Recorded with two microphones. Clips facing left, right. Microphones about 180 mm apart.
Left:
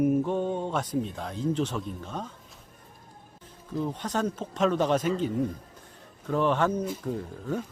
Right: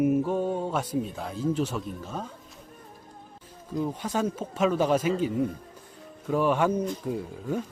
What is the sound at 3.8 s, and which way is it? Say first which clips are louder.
Speech: right 1 dB; 10° right (ahead or behind).